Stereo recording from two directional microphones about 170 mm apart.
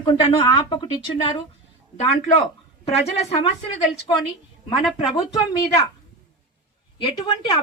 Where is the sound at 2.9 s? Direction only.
35° left (ahead or behind).